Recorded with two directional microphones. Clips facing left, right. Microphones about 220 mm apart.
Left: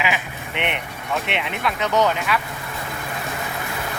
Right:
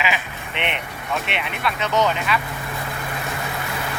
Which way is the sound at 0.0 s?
15° left (ahead or behind).